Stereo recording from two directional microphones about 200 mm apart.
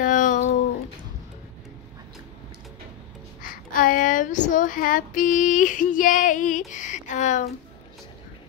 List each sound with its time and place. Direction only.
0.0 s a sound: 40° left (ahead or behind)
3.4 s child singing: 45° left (ahead or behind)
6.7 s speech: 40° left (ahead or behind)